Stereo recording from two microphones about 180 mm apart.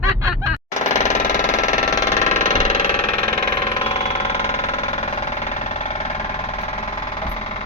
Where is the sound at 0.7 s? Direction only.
40° left (ahead or behind).